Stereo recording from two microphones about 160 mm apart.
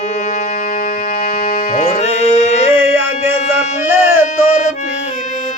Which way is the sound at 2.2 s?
45° left (ahead or behind).